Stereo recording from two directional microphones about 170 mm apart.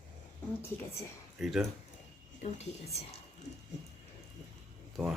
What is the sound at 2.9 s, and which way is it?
Speech, 35° left (ahead or behind).